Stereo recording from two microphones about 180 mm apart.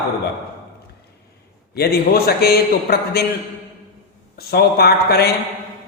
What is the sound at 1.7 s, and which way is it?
A man's voice, 60° left (ahead or behind).